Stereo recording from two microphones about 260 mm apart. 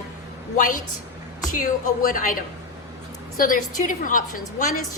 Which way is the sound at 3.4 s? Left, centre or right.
Left.